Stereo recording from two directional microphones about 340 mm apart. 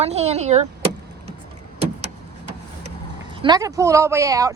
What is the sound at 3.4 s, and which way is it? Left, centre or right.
Speech, centre.